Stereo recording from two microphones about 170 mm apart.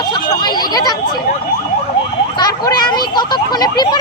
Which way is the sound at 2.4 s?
25° left (ahead or behind).